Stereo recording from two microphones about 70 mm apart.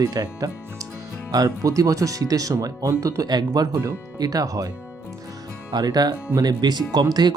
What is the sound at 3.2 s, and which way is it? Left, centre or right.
Speech, right.